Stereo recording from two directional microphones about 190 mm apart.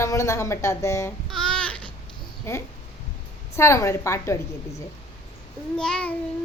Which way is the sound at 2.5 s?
15° left (ahead or behind).